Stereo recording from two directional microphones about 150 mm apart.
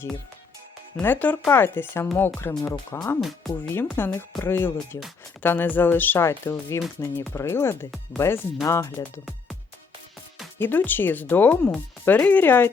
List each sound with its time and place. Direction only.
1.0 s speech: 10° left (ahead or behind)
3.2 s speech: centre (ahead or behind)
3.6 s speech: 15° left (ahead or behind)
10.6 s speech: 15° left (ahead or behind)